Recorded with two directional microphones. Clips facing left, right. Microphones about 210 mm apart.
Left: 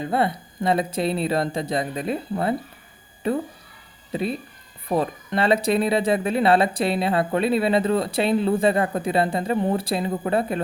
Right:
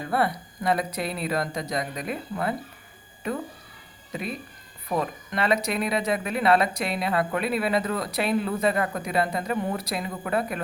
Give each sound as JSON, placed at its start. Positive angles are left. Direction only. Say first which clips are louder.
{"t": 0.0, "sound": "speech", "louder": "left 3 dB", "side_deg": 25}